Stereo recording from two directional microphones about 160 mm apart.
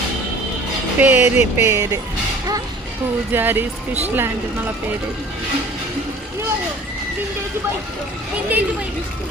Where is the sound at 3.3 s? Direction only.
15° right (ahead or behind).